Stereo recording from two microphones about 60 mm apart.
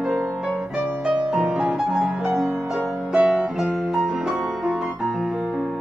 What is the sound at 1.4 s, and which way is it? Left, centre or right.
Music, centre.